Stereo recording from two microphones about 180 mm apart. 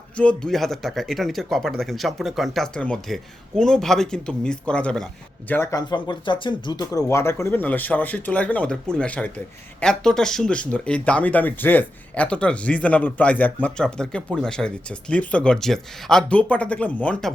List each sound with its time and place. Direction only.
0.2 s speech: 5° left (ahead or behind)
5.9 s speech: 25° left (ahead or behind); by 17.3 s 5° left (ahead or behind)